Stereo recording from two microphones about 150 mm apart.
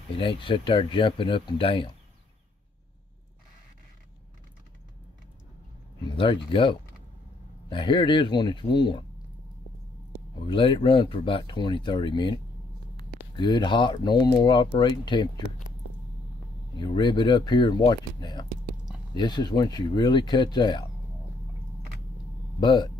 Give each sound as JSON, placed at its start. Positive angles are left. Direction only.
{"t": 0.1, "sound": "speech", "side_deg": 35}
{"t": 6.1, "sound": "speech", "side_deg": 35}
{"t": 10.4, "sound": "speech", "side_deg": 35}
{"t": 13.4, "sound": "speech", "side_deg": 30}
{"t": 16.7, "sound": "speech", "side_deg": 30}
{"t": 22.6, "sound": "speech", "side_deg": 30}